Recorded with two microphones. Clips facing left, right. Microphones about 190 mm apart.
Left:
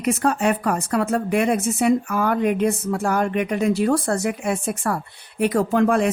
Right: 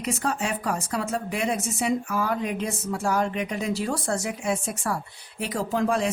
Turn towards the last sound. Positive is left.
turn(degrees=60)  # may be behind; listen again after turning